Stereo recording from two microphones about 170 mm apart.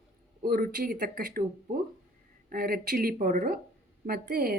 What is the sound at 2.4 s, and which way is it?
Speech, 60° right (ahead or behind).